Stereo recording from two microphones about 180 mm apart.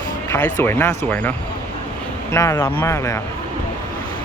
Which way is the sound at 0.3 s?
10° left (ahead or behind).